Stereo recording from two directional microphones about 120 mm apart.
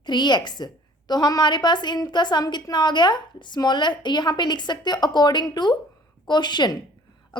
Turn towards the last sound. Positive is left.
turn(degrees=40)  # may be behind; listen again after turning